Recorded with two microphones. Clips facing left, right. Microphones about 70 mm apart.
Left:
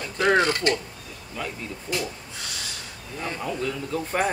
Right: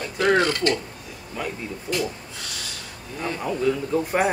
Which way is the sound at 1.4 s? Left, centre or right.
Centre.